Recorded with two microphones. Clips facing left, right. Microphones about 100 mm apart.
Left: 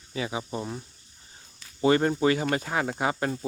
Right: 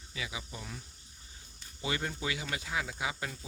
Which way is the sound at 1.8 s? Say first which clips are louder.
Left 14 dB; 50° left (ahead or behind).